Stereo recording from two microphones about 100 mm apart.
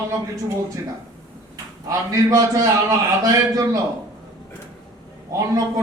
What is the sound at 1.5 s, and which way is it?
A man's voice, 35° right (ahead or behind).